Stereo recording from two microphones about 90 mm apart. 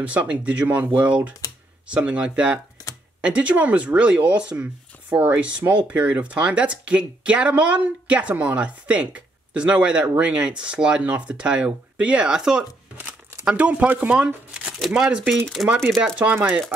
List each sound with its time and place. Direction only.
0.0 s speech: 15° right (ahead or behind)
12.9 s crumpling: 25° right (ahead or behind)
13.5 s speech: 15° right (ahead or behind)
16.3 s speech: 20° right (ahead or behind)